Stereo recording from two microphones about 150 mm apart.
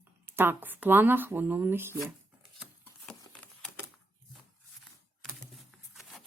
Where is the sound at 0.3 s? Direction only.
15° right (ahead or behind).